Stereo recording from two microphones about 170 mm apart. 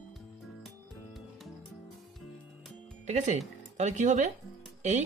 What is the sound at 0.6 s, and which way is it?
Music, centre (ahead or behind).